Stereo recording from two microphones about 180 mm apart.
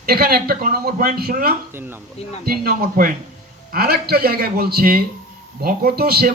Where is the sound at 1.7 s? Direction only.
10° right (ahead or behind).